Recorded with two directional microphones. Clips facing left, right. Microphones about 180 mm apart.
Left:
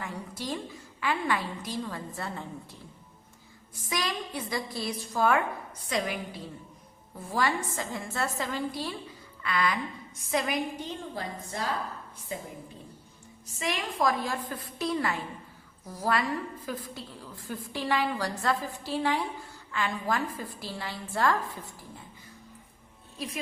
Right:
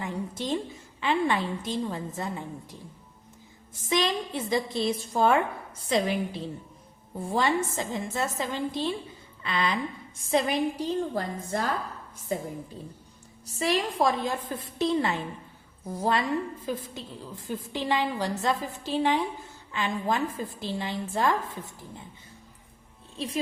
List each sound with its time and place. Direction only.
0.0 s a woman's voice: 20° right (ahead or behind)
11.1 s a woman's voice: 50° right (ahead or behind); by 21.6 s 20° right (ahead or behind)
23.1 s speech: 30° right (ahead or behind)